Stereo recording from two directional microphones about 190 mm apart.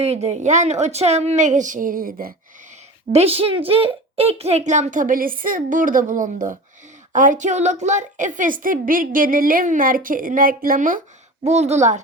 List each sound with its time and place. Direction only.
0.0 s a child's voice: 35° right (ahead or behind)
3.1 s a child's voice: 30° right (ahead or behind)